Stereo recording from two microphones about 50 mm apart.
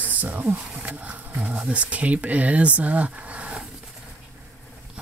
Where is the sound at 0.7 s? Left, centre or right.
Right.